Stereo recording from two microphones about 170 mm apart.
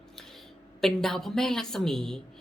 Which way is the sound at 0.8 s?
Centre (ahead or behind).